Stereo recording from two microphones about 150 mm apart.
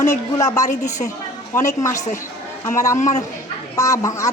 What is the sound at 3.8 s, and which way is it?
Speech, 20° left (ahead or behind).